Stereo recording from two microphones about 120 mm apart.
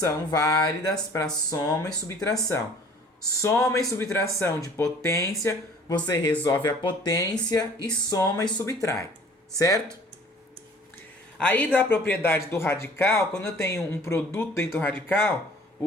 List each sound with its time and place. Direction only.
0.0 s speech: 30° left (ahead or behind)
11.3 s speech: 10° left (ahead or behind)